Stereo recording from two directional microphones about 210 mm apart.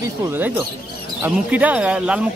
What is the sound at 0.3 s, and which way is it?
Speech, 10° right (ahead or behind).